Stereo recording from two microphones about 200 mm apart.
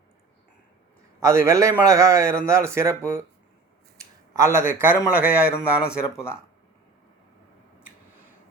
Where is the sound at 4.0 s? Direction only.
15° right (ahead or behind).